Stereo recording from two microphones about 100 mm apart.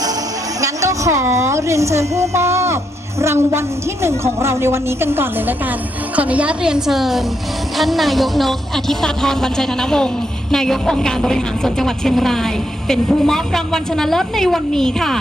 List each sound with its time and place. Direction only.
0.6 s a woman's voice: 30° right (ahead or behind); by 15.2 s 5° left (ahead or behind)